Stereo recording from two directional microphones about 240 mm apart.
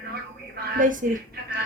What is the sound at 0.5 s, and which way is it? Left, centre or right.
Speech, right.